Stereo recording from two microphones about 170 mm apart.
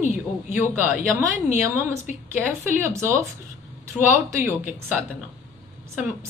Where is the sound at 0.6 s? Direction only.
15° right (ahead or behind).